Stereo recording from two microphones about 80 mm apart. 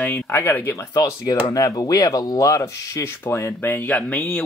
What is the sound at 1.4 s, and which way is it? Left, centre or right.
Speech, left.